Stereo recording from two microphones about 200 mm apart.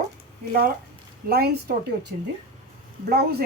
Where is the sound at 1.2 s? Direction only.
50° right (ahead or behind).